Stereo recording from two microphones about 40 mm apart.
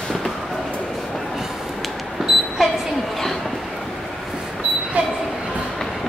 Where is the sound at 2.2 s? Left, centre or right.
Centre.